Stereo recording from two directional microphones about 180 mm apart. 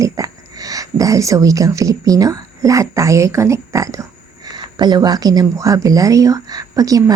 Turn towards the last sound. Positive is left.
turn(degrees=-20)  # may be behind; listen again after turning